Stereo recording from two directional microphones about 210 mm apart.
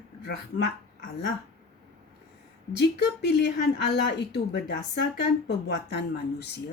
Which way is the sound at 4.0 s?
55° left (ahead or behind).